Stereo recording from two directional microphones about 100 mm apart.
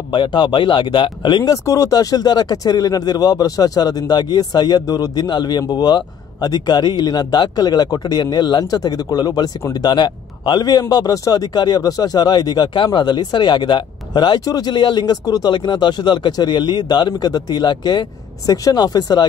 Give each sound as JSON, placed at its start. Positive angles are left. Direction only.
{"t": 0.1, "sound": "speech", "side_deg": 55}
{"t": 1.5, "sound": "speech", "side_deg": 35}